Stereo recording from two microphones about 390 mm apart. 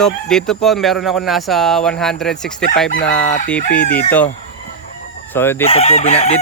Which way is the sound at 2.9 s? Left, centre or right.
Left.